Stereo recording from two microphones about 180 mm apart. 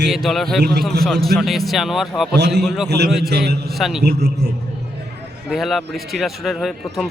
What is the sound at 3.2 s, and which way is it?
Speech, 65° right (ahead or behind).